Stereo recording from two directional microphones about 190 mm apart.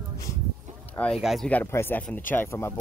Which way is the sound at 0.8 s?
5° left (ahead or behind).